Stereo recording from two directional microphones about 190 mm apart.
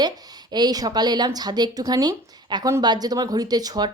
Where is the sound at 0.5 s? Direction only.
20° right (ahead or behind).